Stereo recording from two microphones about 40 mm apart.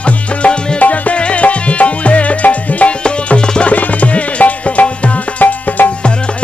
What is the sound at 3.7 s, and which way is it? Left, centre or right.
Music, left.